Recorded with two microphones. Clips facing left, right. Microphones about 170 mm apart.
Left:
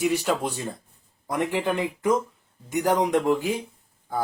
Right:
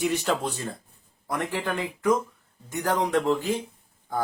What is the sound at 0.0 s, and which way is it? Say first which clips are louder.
Speech: left 2 dB; 10° left (ahead or behind).